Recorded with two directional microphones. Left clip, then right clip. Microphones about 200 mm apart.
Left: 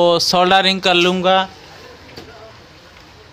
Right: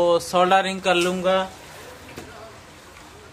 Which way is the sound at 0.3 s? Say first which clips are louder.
Left 5 dB; 45° left (ahead or behind).